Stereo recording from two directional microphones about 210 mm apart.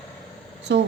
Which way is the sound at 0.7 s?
60° right (ahead or behind).